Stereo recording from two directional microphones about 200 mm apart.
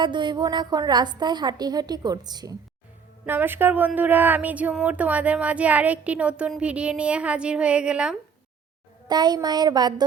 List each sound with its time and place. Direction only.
0.0 s a woman's voice: 25° right (ahead or behind); by 8.2 s 5° right (ahead or behind)
9.0 s a woman's voice: 20° right (ahead or behind)